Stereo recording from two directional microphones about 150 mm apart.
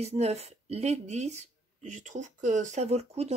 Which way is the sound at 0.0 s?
45° right (ahead or behind).